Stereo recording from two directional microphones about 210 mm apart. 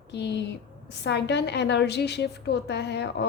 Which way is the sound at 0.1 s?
55° left (ahead or behind).